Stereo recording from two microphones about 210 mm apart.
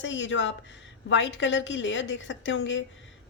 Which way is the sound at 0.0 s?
60° left (ahead or behind).